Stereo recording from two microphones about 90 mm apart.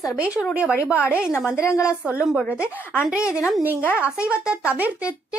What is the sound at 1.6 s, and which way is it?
Speech, 35° left (ahead or behind).